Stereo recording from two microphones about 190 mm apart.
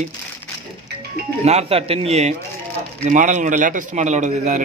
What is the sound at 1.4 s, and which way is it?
Speech, 35° right (ahead or behind).